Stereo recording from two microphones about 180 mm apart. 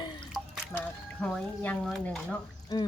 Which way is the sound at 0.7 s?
5° left (ahead or behind).